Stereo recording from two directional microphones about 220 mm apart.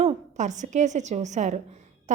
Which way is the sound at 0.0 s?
30° right (ahead or behind).